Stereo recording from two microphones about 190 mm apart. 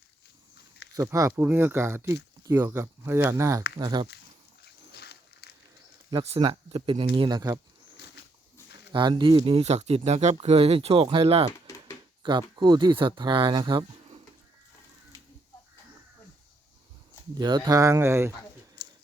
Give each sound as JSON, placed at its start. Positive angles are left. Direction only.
{"t": 0.9, "sound": "speech", "side_deg": -15}
{"t": 4.6, "sound": "a sound", "side_deg": 60}
{"t": 6.1, "sound": "speech", "side_deg": -25}
{"t": 8.9, "sound": "speech", "side_deg": -25}
{"t": 17.3, "sound": "speech", "side_deg": -20}